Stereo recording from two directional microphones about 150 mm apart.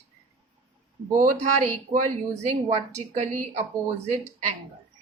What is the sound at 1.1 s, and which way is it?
A woman's voice, 65° right (ahead or behind).